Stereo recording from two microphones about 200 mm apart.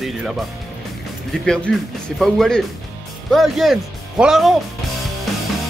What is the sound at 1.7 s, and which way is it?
Speech, 5° left (ahead or behind).